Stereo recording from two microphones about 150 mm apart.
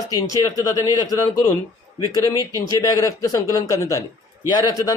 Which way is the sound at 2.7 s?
25° left (ahead or behind).